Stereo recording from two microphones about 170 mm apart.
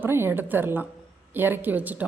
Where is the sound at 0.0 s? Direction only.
15° right (ahead or behind).